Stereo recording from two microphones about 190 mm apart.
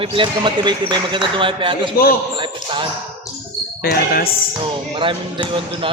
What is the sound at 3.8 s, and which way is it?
Speech, 50° left (ahead or behind).